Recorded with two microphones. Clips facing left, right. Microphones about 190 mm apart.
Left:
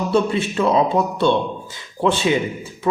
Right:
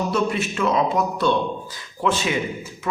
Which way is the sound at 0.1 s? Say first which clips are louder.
Left 4 dB; 30° left (ahead or behind).